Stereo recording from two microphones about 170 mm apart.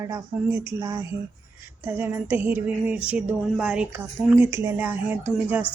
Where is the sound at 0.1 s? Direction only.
15° right (ahead or behind).